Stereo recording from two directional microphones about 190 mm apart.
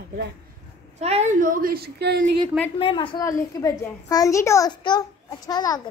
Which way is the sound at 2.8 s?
25° left (ahead or behind).